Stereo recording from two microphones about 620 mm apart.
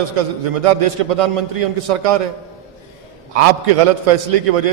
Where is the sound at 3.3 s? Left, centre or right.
Right.